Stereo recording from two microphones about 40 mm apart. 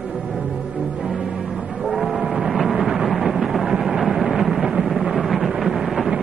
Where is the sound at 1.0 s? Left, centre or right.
Centre.